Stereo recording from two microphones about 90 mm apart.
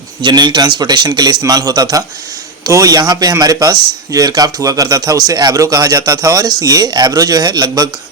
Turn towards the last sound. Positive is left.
turn(degrees=-45)  # may be behind; listen again after turning